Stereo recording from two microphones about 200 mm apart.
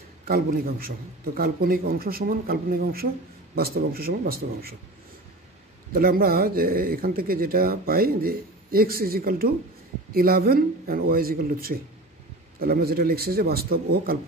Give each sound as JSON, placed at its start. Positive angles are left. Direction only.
{"t": 0.2, "sound": "speech", "side_deg": -50}
{"t": 5.9, "sound": "speech", "side_deg": -45}